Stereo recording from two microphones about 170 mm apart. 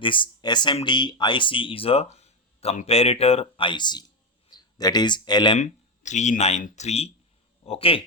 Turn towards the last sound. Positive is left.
turn(degrees=35)  # may be behind; listen again after turning